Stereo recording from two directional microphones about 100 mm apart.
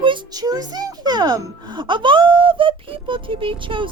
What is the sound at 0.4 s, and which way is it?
Speech, 40° right (ahead or behind).